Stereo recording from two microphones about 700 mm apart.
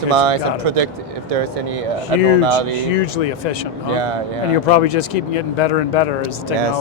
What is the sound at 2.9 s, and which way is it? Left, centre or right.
Speech, left.